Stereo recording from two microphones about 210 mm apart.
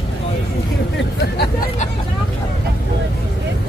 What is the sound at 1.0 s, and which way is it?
Hubbub, 55° left (ahead or behind).